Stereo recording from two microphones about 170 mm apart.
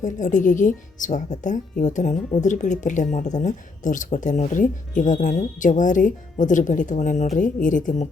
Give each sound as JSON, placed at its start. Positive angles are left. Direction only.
{"t": 0.0, "sound": "speech", "side_deg": 50}